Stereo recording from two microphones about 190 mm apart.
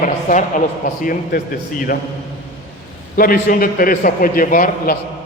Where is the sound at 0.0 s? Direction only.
40° left (ahead or behind).